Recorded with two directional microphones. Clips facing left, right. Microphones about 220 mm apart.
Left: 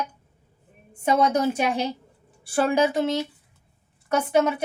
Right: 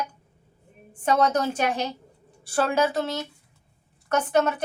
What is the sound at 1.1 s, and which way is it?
A woman's voice, 10° left (ahead or behind).